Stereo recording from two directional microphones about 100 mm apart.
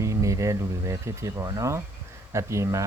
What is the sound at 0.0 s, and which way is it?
Speech, 30° right (ahead or behind).